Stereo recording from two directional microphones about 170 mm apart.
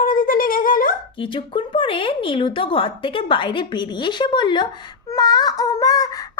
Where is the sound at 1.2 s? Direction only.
30° left (ahead or behind).